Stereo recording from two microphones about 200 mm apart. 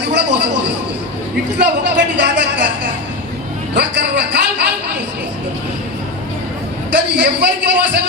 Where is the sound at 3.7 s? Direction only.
55° right (ahead or behind).